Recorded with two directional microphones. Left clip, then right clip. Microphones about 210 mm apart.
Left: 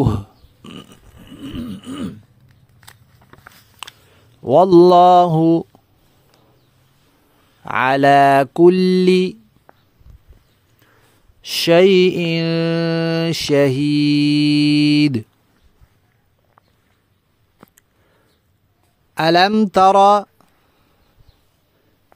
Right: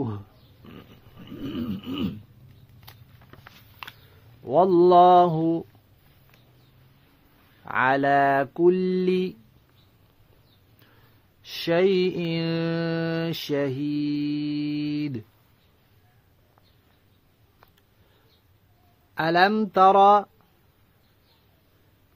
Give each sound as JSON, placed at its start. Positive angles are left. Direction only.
{"t": 0.0, "sound": "a sound", "side_deg": 50}
{"t": 1.2, "sound": "snoring", "side_deg": 30}
{"t": 3.8, "sound": "a sound", "side_deg": 35}
{"t": 4.5, "sound": "mantra", "side_deg": 60}
{"t": 7.6, "sound": "mantra", "side_deg": 50}
{"t": 11.4, "sound": "mantra", "side_deg": 45}
{"t": 19.1, "sound": "mantra", "side_deg": 45}